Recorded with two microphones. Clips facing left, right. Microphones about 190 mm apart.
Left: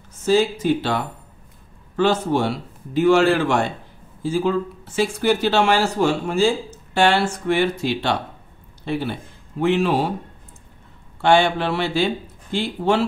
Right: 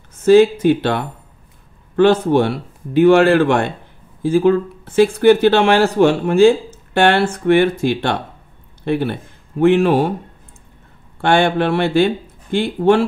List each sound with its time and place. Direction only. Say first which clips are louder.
0.2 s speech: right 8 dB; 60° right (ahead or behind)
11.1 s speech: right 2 dB; 55° right (ahead or behind)